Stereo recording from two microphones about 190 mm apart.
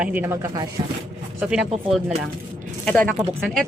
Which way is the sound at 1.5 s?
5° right (ahead or behind).